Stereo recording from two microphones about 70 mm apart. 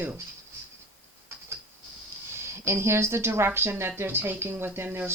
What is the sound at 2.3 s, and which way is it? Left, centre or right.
Speech, right.